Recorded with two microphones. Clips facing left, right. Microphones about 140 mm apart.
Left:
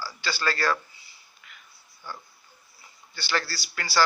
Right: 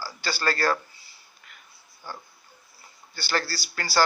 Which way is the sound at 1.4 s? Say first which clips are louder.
Left 1 dB; 45° right (ahead or behind).